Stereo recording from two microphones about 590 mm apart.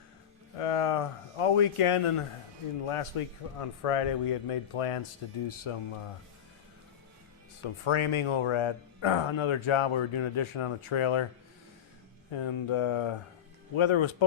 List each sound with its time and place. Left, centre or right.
0.5 s a man's voice: left
7.9 s speech: left
12.3 s speech: left